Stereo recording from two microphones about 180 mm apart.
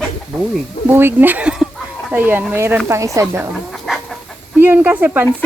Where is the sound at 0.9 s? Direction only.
10° right (ahead or behind).